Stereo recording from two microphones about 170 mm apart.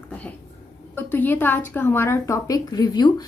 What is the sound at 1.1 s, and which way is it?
Speech, 10° left (ahead or behind).